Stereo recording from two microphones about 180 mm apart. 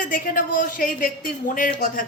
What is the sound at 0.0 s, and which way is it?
A woman's voice, 50° left (ahead or behind).